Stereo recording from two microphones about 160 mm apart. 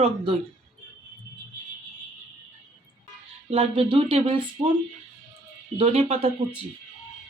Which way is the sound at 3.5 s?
35° right (ahead or behind).